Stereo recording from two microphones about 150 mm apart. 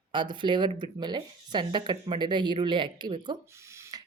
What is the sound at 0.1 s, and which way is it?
A woman's voice, 30° right (ahead or behind).